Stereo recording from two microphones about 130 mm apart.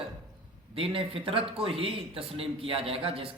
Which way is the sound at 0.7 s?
45° right (ahead or behind).